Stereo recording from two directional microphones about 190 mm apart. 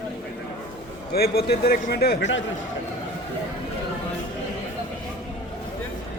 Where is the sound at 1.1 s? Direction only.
55° left (ahead or behind).